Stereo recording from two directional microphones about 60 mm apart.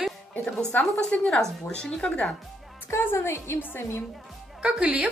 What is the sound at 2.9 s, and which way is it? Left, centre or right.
A woman's voice, left.